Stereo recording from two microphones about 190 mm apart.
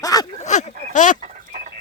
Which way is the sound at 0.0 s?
20° left (ahead or behind).